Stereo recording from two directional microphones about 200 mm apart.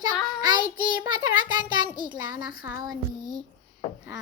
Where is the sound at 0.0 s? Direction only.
20° right (ahead or behind).